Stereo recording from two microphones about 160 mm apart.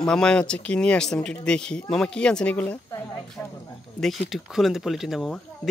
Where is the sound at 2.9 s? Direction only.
20° left (ahead or behind).